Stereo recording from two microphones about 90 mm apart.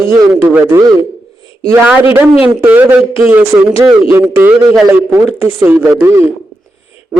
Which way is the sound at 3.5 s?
45° right (ahead or behind).